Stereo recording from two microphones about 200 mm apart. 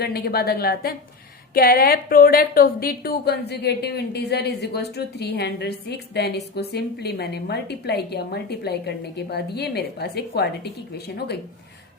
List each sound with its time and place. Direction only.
0.0 s a woman's voice: 50° left (ahead or behind)